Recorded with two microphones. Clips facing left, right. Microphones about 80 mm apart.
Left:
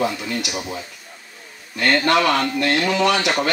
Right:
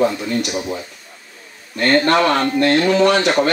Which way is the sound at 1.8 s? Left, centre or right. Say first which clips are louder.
Right 3 dB; right.